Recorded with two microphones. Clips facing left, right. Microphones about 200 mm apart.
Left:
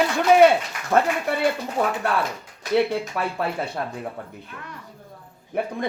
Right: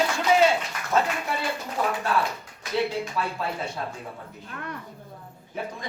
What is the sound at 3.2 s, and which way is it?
Speech, 60° left (ahead or behind).